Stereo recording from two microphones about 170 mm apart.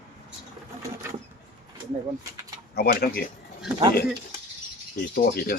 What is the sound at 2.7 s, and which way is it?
Speech, 65° left (ahead or behind).